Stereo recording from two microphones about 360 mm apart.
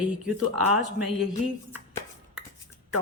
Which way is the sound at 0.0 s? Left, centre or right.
Centre.